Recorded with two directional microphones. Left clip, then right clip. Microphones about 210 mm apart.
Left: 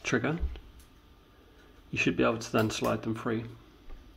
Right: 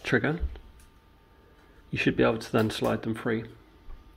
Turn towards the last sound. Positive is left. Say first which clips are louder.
# right 3 dB
turn(degrees=-20)  # may be behind; listen again after turning